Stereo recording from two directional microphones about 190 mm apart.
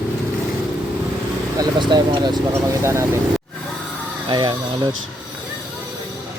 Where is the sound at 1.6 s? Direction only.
20° right (ahead or behind).